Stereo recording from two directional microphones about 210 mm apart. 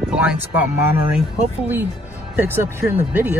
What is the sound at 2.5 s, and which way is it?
Speech, 10° right (ahead or behind).